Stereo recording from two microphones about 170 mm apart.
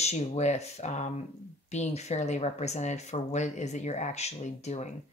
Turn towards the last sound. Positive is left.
turn(degrees=40)  # may be behind; listen again after turning